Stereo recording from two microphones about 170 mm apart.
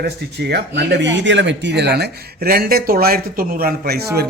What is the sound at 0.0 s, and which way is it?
Speech, 75° right (ahead or behind).